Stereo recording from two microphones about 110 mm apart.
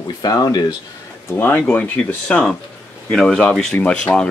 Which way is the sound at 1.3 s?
15° left (ahead or behind).